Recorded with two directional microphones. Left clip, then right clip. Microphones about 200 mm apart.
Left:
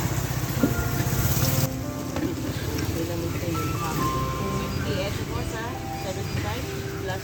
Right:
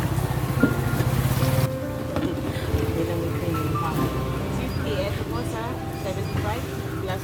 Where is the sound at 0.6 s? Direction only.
40° right (ahead or behind).